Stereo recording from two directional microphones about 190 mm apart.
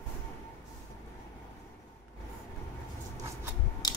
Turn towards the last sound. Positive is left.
turn(degrees=20)  # may be behind; listen again after turning